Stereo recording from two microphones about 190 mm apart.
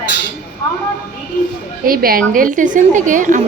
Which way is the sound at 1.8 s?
50° right (ahead or behind).